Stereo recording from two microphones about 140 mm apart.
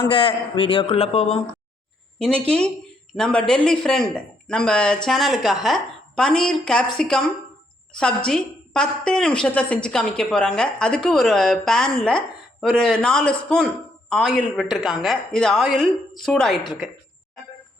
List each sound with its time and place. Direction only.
0.1 s speech: 40° left (ahead or behind)
2.5 s a woman's voice: 5° left (ahead or behind)